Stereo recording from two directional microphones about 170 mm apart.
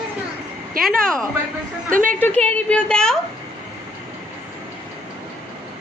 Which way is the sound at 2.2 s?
10° left (ahead or behind).